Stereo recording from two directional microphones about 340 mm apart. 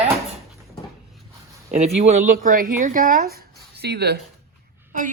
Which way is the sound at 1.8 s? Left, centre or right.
Centre.